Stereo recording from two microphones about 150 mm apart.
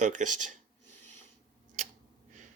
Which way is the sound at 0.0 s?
55° right (ahead or behind).